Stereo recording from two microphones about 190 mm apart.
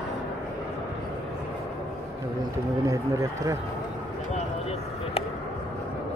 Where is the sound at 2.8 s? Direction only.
15° right (ahead or behind).